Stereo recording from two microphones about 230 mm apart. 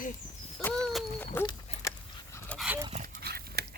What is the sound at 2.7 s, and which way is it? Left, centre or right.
Dog, centre.